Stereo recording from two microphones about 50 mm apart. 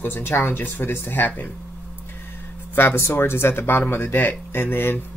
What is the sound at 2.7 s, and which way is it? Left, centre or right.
Speech, left.